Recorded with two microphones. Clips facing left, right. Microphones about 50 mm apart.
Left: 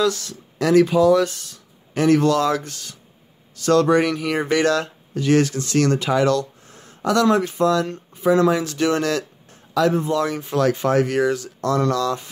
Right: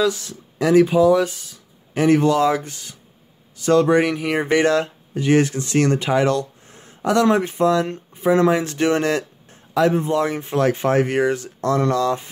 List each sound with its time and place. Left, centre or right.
0.0 s speech: centre